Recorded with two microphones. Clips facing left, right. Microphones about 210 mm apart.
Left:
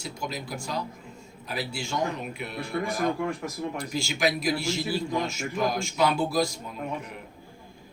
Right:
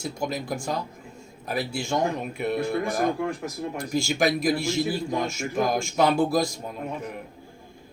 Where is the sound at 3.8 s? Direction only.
45° right (ahead or behind).